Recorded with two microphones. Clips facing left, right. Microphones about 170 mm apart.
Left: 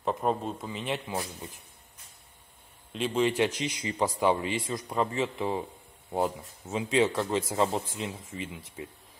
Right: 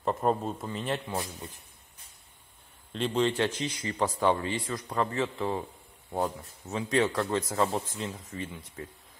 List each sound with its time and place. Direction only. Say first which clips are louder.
0.0 s a man's voice: right 1 dB; centre (ahead or behind)
2.9 s speech: even; 5° left (ahead or behind)
7.3 s speech: left 2 dB; 25° left (ahead or behind)